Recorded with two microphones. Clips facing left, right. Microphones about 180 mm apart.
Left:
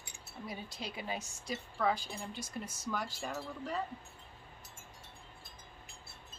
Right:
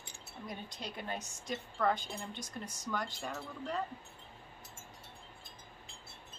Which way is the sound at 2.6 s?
15° right (ahead or behind).